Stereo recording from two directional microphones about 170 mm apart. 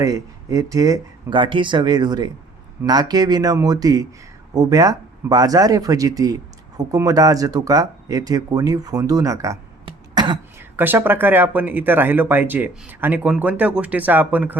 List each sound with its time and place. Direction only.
0.0 s speech: 20° right (ahead or behind)
9.8 s throat clearing: 25° right (ahead or behind)
10.6 s speech: 10° right (ahead or behind)